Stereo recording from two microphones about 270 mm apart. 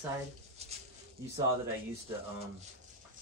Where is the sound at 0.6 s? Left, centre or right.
Right.